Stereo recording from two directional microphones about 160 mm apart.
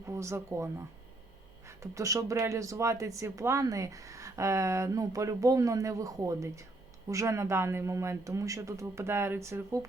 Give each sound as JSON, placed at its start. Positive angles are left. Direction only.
{"t": 0.0, "sound": "speech", "side_deg": -15}